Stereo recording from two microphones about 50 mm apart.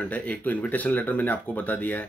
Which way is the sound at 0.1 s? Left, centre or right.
Left.